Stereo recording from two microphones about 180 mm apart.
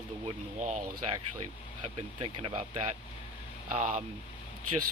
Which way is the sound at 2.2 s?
35° right (ahead or behind).